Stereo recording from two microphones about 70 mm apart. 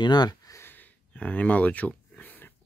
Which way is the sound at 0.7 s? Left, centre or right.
Left.